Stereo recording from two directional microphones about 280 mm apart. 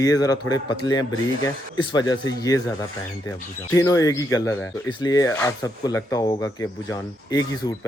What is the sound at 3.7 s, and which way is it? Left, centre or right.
Speech, centre.